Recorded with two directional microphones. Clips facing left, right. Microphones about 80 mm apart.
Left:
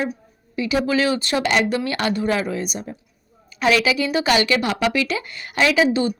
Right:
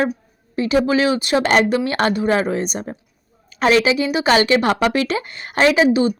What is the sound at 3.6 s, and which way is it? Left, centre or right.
Speech, right.